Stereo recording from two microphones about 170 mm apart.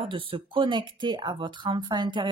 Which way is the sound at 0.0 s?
30° right (ahead or behind).